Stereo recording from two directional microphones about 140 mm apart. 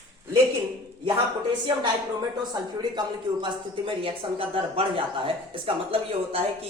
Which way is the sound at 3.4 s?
40° right (ahead or behind).